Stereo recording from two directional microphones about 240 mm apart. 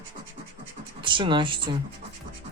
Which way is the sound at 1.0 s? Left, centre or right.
Centre.